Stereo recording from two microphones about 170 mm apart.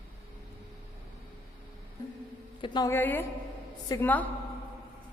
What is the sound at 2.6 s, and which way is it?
Speech, 25° left (ahead or behind).